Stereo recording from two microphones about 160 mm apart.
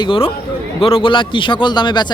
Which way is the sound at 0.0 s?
35° left (ahead or behind).